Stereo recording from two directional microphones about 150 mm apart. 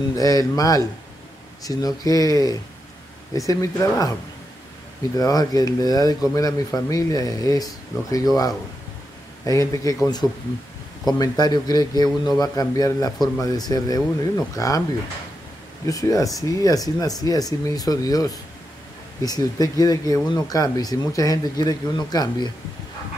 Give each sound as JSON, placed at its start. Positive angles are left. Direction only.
{"t": 0.1, "sound": "speech", "side_deg": 25}
{"t": 5.1, "sound": "speech", "side_deg": 25}
{"t": 11.1, "sound": "speech", "side_deg": 25}
{"t": 15.8, "sound": "speech", "side_deg": 25}